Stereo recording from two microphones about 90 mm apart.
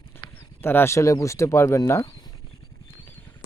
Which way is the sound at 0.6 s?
25° left (ahead or behind).